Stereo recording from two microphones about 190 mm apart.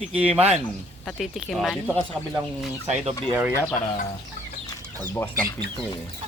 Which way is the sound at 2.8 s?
40° right (ahead or behind).